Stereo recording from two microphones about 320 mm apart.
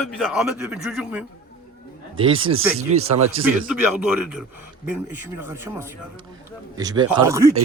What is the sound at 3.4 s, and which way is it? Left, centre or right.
A man's voice, centre.